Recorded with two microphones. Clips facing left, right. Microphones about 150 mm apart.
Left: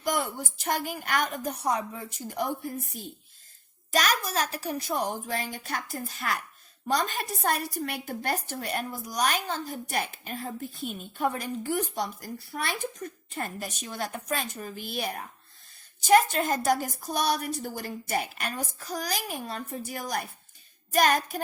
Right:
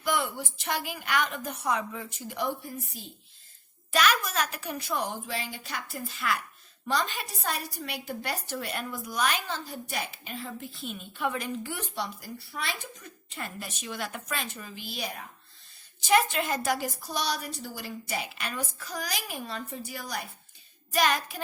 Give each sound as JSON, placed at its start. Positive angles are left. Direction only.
{"t": 0.0, "sound": "a woman's voice", "side_deg": 40}
{"t": 3.9, "sound": "a woman's voice", "side_deg": 35}
{"t": 16.0, "sound": "a woman's voice", "side_deg": 45}